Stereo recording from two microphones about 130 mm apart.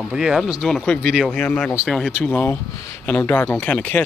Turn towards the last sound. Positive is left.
turn(degrees=15)  # may be behind; listen again after turning